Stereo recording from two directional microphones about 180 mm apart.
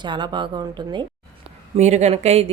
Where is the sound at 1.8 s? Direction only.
40° right (ahead or behind).